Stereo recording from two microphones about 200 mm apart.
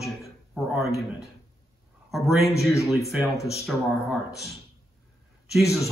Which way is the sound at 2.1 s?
Centre (ahead or behind).